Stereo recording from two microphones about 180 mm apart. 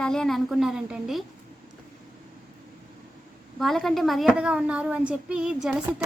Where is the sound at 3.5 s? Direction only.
Centre (ahead or behind).